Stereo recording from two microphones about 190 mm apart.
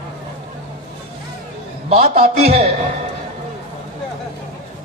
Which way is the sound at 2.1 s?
30° right (ahead or behind).